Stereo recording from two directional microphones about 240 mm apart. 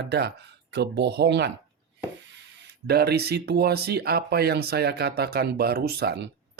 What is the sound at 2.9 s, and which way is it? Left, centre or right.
Speech, right.